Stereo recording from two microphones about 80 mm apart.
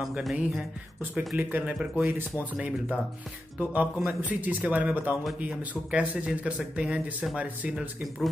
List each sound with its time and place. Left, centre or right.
0.2 s music: centre
1.3 s a man's voice: right